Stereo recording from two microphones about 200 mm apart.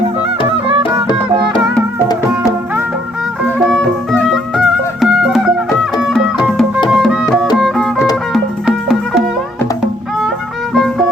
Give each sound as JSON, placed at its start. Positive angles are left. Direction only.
{"t": 0.5, "sound": "music", "side_deg": -25}
{"t": 2.3, "sound": "music", "side_deg": -10}
{"t": 3.6, "sound": "music", "side_deg": 0}
{"t": 10.8, "sound": "music", "side_deg": 0}